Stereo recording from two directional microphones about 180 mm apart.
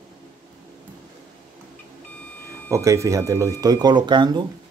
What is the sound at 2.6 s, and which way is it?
Speech, 15° right (ahead or behind).